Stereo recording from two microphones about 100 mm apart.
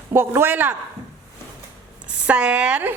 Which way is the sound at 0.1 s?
25° right (ahead or behind).